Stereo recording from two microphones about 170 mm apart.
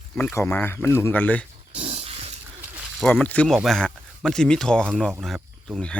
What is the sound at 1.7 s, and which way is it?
Dog, 40° right (ahead or behind).